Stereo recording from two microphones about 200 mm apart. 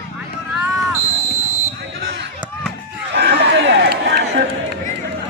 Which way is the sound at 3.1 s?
55° right (ahead or behind).